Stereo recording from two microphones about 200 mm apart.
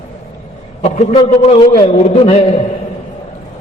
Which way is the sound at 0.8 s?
35° left (ahead or behind).